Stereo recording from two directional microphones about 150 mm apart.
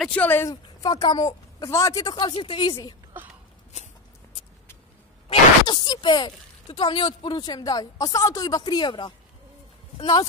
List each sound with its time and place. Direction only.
0.0 s speech: 10° left (ahead or behind); by 3.0 s 25° left (ahead or behind)
3.7 s a sound: 50° left (ahead or behind)
5.3 s speech: 30° left (ahead or behind)